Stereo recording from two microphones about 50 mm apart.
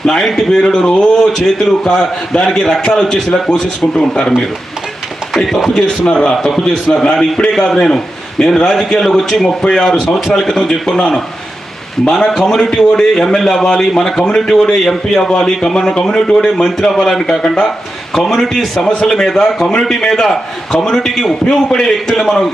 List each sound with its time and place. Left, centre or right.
0.0 s a man's voice: centre
5.4 s a man's voice: centre
5.7 s a man's voice: centre
10.2 s a man's voice: centre
12.3 s a man's voice: centre
12.7 s a man's voice: centre
21.4 s a man's voice: centre
21.8 s a man's voice: centre